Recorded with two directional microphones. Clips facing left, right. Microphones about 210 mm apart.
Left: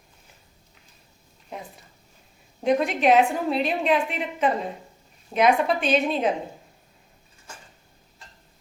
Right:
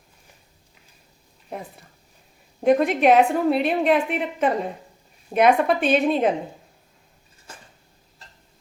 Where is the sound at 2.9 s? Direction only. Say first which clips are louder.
Right 3 dB; 55° right (ahead or behind).